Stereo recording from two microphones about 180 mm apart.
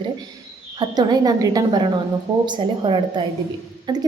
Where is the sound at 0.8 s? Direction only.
20° right (ahead or behind).